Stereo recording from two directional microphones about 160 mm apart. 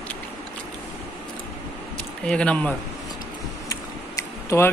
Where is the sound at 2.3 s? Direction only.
5° left (ahead or behind).